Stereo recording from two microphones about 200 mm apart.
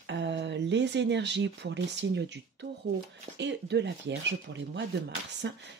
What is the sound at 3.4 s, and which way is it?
Speech, 60° right (ahead or behind).